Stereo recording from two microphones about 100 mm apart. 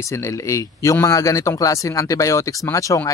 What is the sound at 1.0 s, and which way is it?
Speech, 30° left (ahead or behind).